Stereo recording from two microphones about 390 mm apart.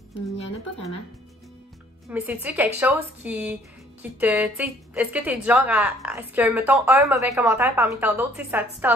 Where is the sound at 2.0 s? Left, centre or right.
Centre.